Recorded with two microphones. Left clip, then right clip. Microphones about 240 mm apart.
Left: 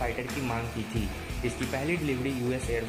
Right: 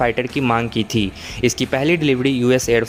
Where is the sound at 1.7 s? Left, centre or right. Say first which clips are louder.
Right 13 dB; right.